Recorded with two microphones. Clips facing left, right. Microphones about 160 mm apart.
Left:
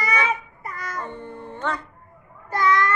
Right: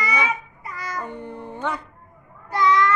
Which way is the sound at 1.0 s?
10° right (ahead or behind).